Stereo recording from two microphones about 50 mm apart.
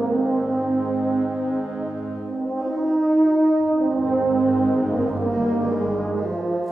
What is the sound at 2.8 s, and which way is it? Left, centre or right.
Brass instrument, centre.